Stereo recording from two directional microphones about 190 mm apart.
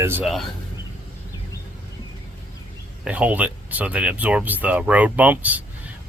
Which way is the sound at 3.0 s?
5° right (ahead or behind).